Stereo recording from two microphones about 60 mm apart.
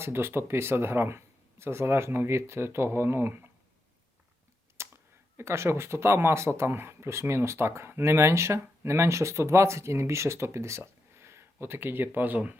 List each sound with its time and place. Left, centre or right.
0.0 s speech: right
4.8 s a sound: right
5.4 s speech: right